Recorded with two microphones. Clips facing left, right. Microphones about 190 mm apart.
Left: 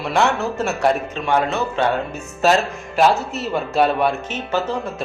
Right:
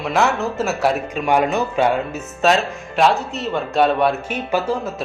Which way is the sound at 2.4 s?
Centre (ahead or behind).